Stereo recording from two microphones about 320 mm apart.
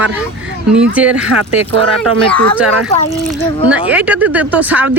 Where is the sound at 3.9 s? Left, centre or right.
Centre.